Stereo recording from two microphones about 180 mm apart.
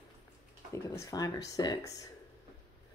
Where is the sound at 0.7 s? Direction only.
15° left (ahead or behind).